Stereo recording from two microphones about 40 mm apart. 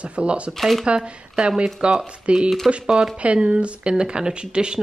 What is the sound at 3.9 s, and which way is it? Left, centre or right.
Speech, centre.